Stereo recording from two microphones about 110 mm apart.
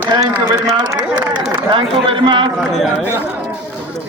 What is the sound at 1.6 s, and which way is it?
Speech, 50° right (ahead or behind).